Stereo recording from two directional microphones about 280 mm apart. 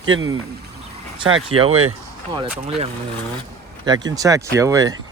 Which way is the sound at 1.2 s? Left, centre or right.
Centre.